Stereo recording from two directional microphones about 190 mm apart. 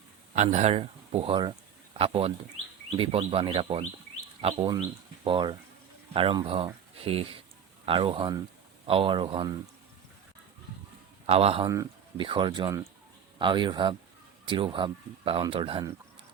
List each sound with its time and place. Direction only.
0.3 s speech: 35° right (ahead or behind)
11.3 s speech: 30° right (ahead or behind)